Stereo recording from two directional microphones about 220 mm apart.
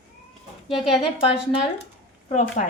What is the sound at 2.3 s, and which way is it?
Speech, 35° left (ahead or behind).